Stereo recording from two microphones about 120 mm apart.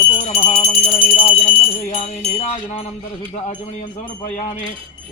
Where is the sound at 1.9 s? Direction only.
60° left (ahead or behind).